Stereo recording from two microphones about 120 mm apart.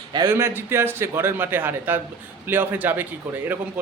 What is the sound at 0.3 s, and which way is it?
A man's voice, 20° right (ahead or behind).